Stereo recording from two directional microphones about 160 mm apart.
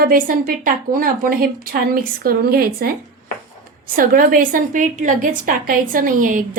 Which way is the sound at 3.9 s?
60° right (ahead or behind).